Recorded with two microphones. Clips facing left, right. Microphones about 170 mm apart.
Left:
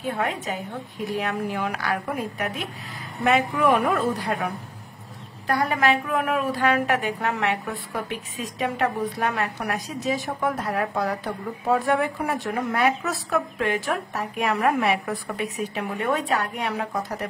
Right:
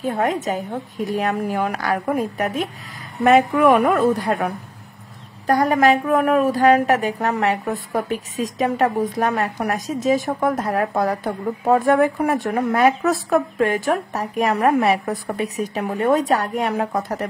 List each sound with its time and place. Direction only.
0.0 s a woman's voice: 40° right (ahead or behind)
5.5 s a woman's voice: 45° right (ahead or behind)